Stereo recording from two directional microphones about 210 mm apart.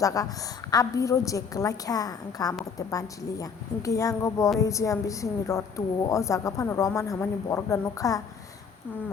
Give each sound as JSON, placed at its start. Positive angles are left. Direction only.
{"t": 0.0, "sound": "a woman's voice", "side_deg": 15}